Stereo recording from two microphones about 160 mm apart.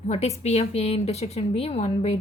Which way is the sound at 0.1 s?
40° left (ahead or behind).